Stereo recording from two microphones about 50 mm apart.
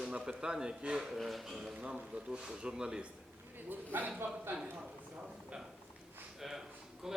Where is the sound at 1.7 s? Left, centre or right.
Centre.